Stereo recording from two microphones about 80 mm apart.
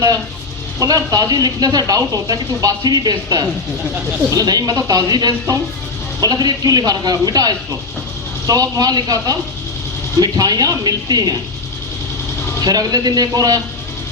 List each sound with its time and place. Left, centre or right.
0.8 s speech: right
12.6 s speech: right